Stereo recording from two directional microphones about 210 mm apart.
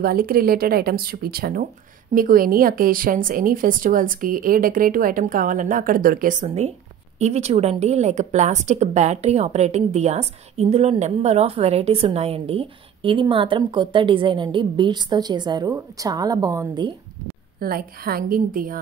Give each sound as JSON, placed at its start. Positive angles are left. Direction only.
{"t": 0.0, "sound": "a woman's voice", "side_deg": -45}
{"t": 17.6, "sound": "speech", "side_deg": -45}